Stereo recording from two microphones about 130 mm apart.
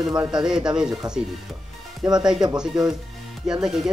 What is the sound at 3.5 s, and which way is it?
Speech, 5° right (ahead or behind).